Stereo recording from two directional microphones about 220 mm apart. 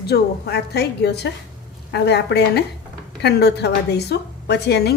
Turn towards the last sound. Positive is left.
turn(degrees=50)  # may be behind; listen again after turning